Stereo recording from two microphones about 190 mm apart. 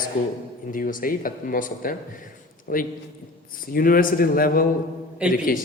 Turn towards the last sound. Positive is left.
turn(degrees=-5)  # may be behind; listen again after turning